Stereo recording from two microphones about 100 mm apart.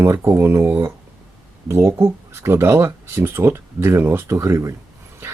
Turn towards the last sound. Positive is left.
turn(degrees=-30)  # may be behind; listen again after turning